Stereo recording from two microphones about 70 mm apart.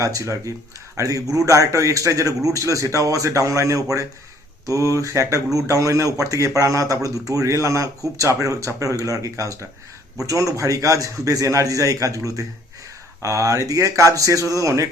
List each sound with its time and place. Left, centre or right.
0.0 s speech: right